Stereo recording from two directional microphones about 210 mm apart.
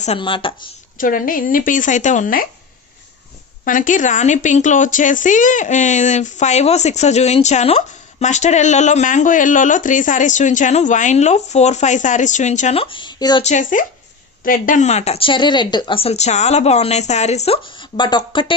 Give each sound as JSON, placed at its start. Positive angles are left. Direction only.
{"t": 0.0, "sound": "speech", "side_deg": 25}
{"t": 0.9, "sound": "speech", "side_deg": 40}
{"t": 3.6, "sound": "speech", "side_deg": 40}
{"t": 13.4, "sound": "speech", "side_deg": 35}